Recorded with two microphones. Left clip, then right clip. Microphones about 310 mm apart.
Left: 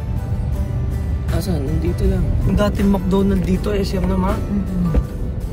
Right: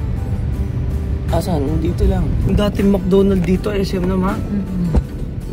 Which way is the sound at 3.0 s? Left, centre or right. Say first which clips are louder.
Right 5 dB; centre.